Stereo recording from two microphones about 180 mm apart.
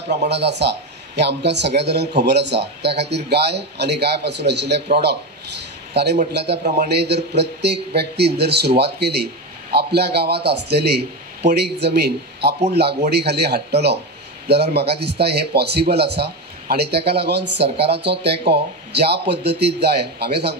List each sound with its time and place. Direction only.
0.1 s speech: 70° right (ahead or behind)
6.3 s speech: 65° right (ahead or behind)